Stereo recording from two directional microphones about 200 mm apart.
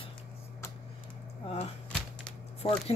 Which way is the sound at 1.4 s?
30° left (ahead or behind).